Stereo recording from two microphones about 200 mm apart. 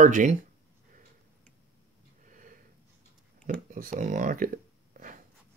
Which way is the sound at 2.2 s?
40° right (ahead or behind).